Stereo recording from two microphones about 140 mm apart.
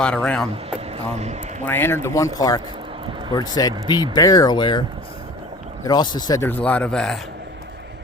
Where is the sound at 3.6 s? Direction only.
30° left (ahead or behind).